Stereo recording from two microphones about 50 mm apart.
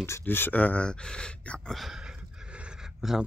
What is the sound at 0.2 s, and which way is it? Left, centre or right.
Speech, left.